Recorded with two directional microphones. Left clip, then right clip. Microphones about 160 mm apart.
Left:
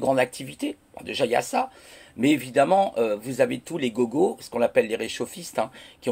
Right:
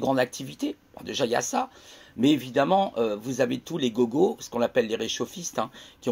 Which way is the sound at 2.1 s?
35° right (ahead or behind).